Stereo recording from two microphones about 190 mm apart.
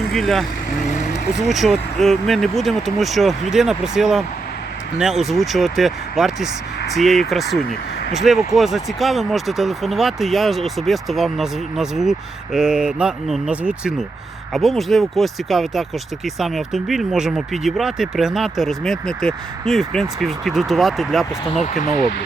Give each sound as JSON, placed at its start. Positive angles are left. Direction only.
{"t": 0.1, "sound": "speech", "side_deg": 0}
{"t": 1.5, "sound": "speech", "side_deg": 0}
{"t": 21.6, "sound": "speech", "side_deg": 40}